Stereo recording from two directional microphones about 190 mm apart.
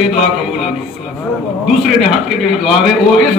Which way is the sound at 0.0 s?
Centre (ahead or behind).